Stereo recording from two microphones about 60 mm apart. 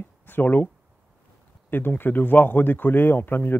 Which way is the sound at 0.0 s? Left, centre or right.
Left.